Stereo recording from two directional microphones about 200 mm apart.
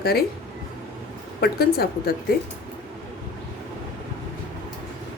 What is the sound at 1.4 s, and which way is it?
Speech, 50° left (ahead or behind).